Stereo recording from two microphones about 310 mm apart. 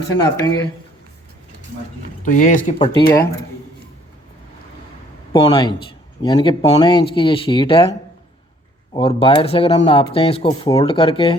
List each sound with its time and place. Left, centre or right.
0.1 s speech: centre
2.2 s speech: left
5.3 s speech: centre
8.9 s speech: centre